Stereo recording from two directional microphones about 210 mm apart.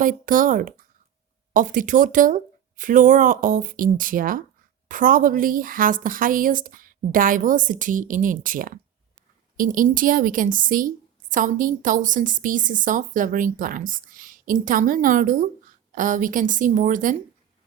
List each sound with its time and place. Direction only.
0.0 s a woman's voice: 40° right (ahead or behind)